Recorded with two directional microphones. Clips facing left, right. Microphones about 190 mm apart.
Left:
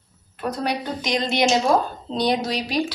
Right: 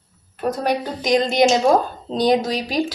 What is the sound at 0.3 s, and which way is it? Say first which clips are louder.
A woman's voice: right 4 dB; 45° right (ahead or behind).